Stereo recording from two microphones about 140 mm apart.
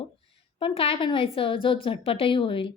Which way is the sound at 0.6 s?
45° left (ahead or behind).